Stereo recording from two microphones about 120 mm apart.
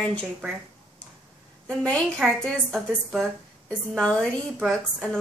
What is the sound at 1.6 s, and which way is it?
A woman's voice, 5° left (ahead or behind).